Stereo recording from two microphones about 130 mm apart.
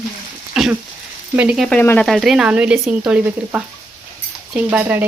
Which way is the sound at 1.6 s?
15° left (ahead or behind).